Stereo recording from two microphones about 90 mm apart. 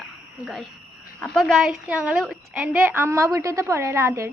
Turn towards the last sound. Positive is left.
turn(degrees=-30)  # may be behind; listen again after turning